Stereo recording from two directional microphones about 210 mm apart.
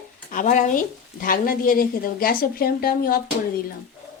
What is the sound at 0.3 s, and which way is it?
Speech, 40° left (ahead or behind).